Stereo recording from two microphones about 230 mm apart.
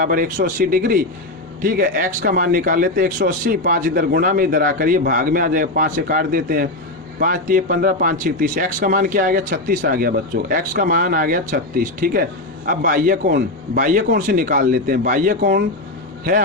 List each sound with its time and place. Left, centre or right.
0.0 s speech: right